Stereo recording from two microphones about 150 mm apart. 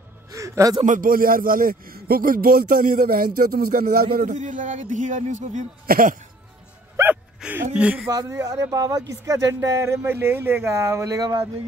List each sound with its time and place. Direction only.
0.3 s a sound: 20° right (ahead or behind)
0.8 s a man's voice: 65° right (ahead or behind)
3.3 s a man's voice: 80° right; by 6.1 s 65° right (ahead or behind)
7.0 s a sound: 20° right (ahead or behind)
7.7 s speech: 10° right (ahead or behind)
8.1 s speech: 25° right (ahead or behind)